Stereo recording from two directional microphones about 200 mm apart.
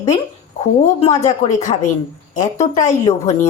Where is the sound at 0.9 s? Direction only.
35° left (ahead or behind).